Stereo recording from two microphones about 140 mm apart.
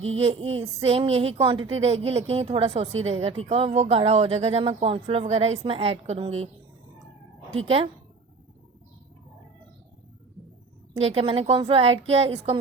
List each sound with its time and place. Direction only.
0.0 s speech: 45° right (ahead or behind)
11.0 s speech: 40° right (ahead or behind)